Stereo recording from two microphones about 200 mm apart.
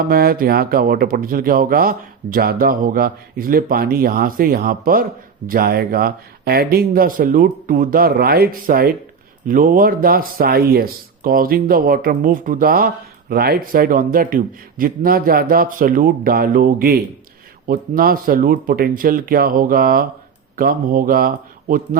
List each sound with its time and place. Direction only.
0.0 s speech: 50° right (ahead or behind)